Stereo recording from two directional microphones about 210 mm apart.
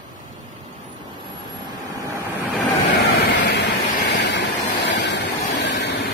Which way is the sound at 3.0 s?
55° left (ahead or behind).